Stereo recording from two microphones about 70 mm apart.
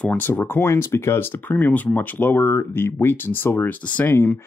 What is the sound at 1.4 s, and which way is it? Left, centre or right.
Speech, left.